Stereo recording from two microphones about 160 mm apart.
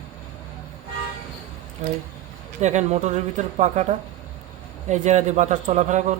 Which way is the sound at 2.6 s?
45° right (ahead or behind).